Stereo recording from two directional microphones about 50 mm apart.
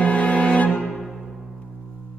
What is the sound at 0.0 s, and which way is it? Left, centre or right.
Music, left.